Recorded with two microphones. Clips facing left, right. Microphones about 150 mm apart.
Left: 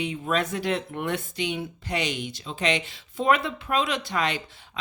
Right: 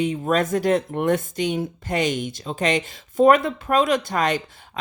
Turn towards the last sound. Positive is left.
turn(degrees=-45)  # may be behind; listen again after turning